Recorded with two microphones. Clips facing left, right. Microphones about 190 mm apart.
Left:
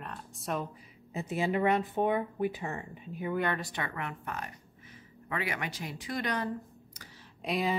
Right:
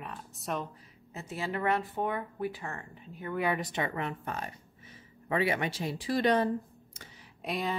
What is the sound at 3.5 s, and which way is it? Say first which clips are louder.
Speech: right 3 dB; 20° right (ahead or behind).